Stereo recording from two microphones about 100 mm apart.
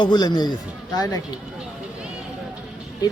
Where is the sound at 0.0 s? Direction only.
45° left (ahead or behind).